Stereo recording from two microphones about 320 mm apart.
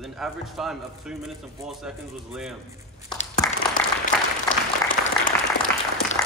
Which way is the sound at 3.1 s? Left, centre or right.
Centre.